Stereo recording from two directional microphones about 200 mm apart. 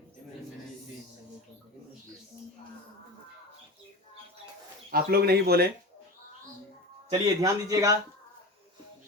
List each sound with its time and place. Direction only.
4.9 s speech: 50° right (ahead or behind)
7.1 s speech: 15° right (ahead or behind)